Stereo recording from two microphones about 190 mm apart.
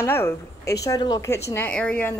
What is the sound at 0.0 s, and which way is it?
Speech, 10° left (ahead or behind).